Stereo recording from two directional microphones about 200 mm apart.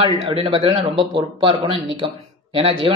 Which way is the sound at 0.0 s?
25° right (ahead or behind).